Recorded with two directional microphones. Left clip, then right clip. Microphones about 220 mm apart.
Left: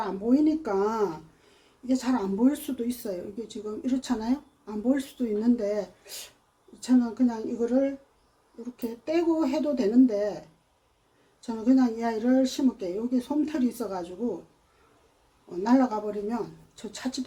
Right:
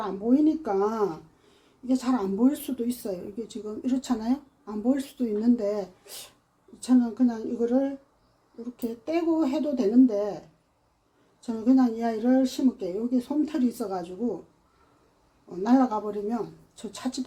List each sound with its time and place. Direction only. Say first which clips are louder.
0.0 s speech: right 1 dB; 15° right (ahead or behind)
15.4 s speech: right 1 dB; 15° right (ahead or behind)